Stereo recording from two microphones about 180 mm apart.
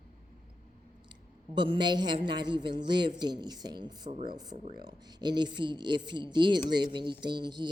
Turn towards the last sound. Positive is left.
turn(degrees=-25)  # may be behind; listen again after turning